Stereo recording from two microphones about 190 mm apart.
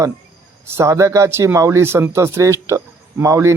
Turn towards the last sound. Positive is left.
turn(degrees=-15)  # may be behind; listen again after turning